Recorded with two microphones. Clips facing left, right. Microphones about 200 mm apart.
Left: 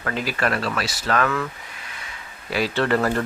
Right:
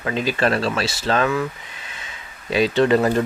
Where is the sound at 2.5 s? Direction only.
20° right (ahead or behind).